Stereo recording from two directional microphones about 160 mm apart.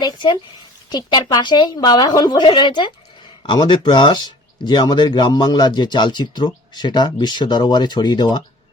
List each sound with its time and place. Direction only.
0.0 s speech: 30° left (ahead or behind)